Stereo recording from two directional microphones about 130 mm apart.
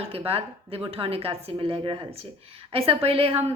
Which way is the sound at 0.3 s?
50° right (ahead or behind).